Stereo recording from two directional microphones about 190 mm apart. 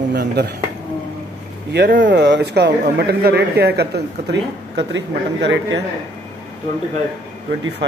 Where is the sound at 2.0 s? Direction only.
65° right (ahead or behind).